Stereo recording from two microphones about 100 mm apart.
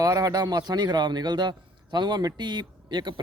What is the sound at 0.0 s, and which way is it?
A man's voice, 35° right (ahead or behind).